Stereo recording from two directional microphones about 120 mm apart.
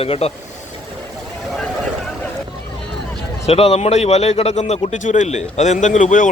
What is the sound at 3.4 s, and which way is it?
Speech, 60° left (ahead or behind).